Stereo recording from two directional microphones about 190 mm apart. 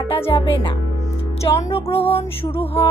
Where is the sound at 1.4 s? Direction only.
15° left (ahead or behind).